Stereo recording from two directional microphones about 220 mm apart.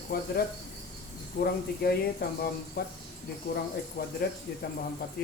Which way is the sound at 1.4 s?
45° left (ahead or behind).